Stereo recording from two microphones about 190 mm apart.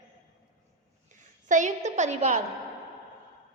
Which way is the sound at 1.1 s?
40° right (ahead or behind).